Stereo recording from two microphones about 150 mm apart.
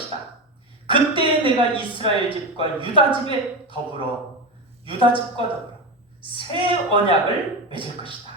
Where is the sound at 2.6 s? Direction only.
35° right (ahead or behind).